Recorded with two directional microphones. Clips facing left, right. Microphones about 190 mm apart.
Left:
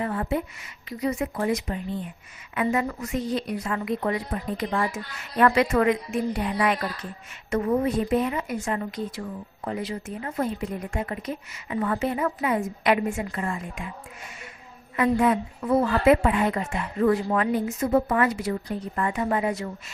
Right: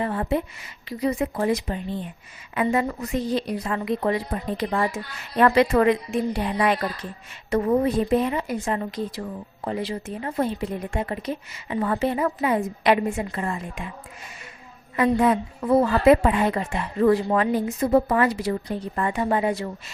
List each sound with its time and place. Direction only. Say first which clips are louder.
0.0 s a woman's voice: right 2 dB; 30° right (ahead or behind)
14.9 s a woman's voice: right 2 dB; 30° right (ahead or behind)